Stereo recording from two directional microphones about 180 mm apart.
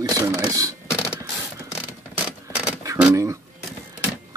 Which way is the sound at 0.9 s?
5° right (ahead or behind).